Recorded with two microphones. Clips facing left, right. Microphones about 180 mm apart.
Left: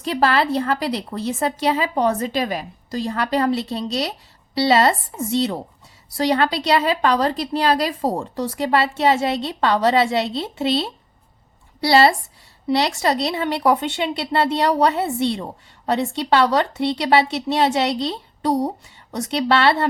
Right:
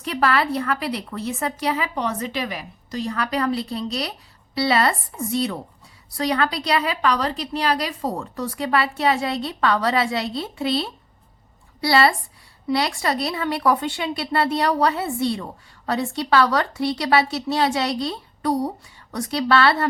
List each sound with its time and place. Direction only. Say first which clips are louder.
0.0 s a woman's voice: left 2 dB; 30° left (ahead or behind)